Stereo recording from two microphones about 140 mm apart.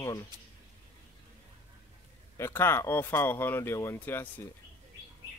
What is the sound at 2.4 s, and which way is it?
Speech, 15° left (ahead or behind).